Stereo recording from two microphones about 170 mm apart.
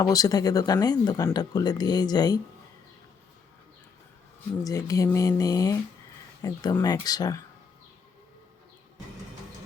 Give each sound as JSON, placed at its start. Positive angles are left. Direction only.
{"t": 0.0, "sound": "speech", "side_deg": 20}
{"t": 4.6, "sound": "speech", "side_deg": 20}